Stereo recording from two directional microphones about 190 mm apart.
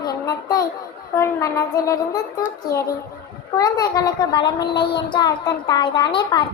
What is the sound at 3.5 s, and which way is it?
Speech, 20° left (ahead or behind).